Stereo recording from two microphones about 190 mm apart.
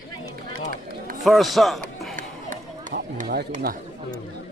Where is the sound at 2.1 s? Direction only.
45° right (ahead or behind).